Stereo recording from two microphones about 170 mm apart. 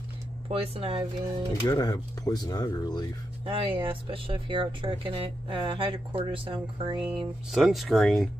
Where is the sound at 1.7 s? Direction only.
20° left (ahead or behind).